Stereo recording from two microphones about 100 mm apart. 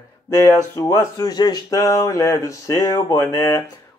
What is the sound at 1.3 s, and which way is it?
Speech, 45° left (ahead or behind).